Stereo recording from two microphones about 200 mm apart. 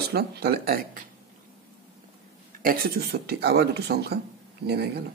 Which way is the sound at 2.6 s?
45° right (ahead or behind).